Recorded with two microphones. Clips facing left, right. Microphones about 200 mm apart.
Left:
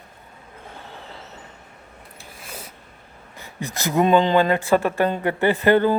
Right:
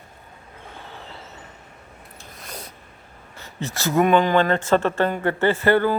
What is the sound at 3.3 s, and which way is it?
Speech, 15° left (ahead or behind).